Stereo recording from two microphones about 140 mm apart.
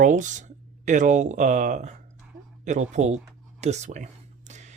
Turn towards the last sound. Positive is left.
turn(degrees=-55)  # may be behind; listen again after turning